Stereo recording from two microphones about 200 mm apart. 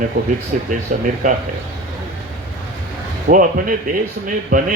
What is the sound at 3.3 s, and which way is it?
Speech, 40° right (ahead or behind).